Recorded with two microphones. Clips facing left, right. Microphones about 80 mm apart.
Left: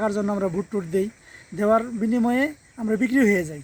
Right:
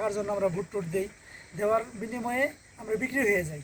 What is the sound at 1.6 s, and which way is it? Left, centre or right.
Speech, left.